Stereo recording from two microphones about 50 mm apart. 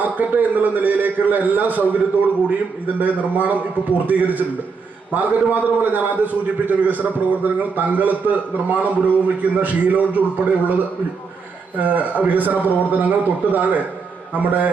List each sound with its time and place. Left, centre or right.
0.0 s a man's voice: right
3.0 s a man's voice: right
11.8 s a man's voice: right